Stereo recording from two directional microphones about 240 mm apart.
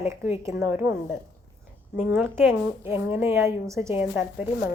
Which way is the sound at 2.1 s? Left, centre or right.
Centre.